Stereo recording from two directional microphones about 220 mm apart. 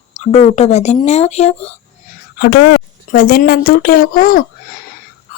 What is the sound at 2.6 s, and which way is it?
Speech, 55° left (ahead or behind).